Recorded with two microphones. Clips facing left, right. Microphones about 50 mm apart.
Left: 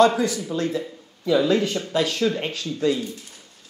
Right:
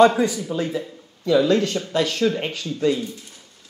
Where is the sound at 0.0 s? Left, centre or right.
Right.